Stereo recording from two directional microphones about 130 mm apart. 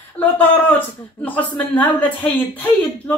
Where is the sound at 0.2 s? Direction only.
15° left (ahead or behind).